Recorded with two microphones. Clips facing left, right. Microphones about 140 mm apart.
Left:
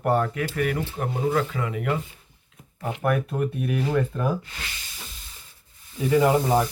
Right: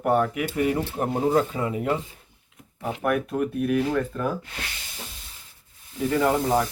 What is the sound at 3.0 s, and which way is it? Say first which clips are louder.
Speech: even; centre (ahead or behind).